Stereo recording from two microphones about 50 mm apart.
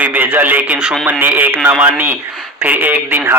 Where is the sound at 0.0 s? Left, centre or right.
Right.